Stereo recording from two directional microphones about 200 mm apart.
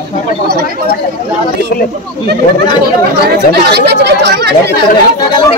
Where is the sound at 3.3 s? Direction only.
55° right (ahead or behind).